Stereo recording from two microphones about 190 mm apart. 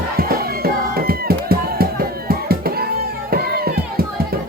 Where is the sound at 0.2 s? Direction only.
50° right (ahead or behind).